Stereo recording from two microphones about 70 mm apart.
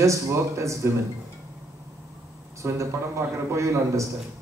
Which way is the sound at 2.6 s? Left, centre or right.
Right.